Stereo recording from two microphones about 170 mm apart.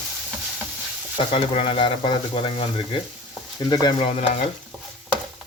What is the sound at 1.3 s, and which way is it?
Speech, 30° left (ahead or behind).